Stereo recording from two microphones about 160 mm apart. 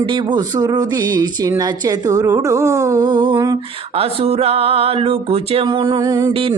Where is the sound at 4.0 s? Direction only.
40° right (ahead or behind).